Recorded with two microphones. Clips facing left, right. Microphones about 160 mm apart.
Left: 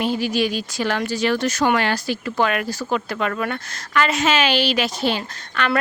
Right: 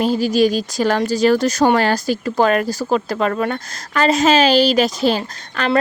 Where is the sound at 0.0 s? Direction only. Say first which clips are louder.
Right 6 dB; 40° right (ahead or behind).